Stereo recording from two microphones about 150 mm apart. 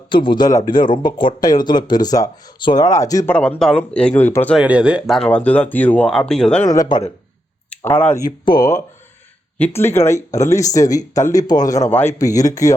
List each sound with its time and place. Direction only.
0.1 s speech: 30° left (ahead or behind)
3.3 s speech: 5° left (ahead or behind)
4.5 s speech: 5° right (ahead or behind)
6.7 s speech: 25° left (ahead or behind)
7.9 s speech: 15° left (ahead or behind)
9.6 s speech: 15° left (ahead or behind)